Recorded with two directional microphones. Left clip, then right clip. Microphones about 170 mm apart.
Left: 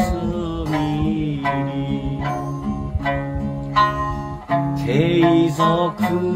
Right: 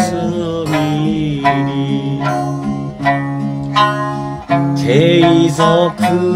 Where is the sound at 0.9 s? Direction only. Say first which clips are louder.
Right 6 dB; 10° left (ahead or behind).